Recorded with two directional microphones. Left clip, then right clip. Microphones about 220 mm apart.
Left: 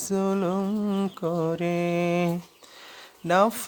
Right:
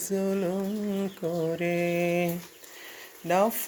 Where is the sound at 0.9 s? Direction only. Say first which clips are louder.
Left 3 dB; 30° left (ahead or behind).